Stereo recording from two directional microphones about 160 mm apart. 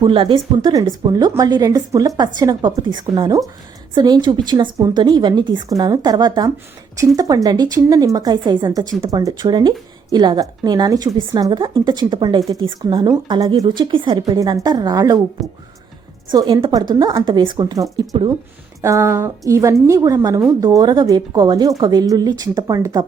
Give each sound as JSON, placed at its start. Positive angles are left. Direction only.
{"t": 0.0, "sound": "speech", "side_deg": -30}
{"t": 15.4, "sound": "a woman's voice", "side_deg": 0}
{"t": 16.3, "sound": "speech", "side_deg": -25}